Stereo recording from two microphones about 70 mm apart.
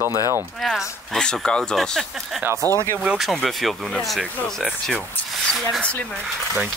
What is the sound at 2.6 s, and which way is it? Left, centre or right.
Speech, right.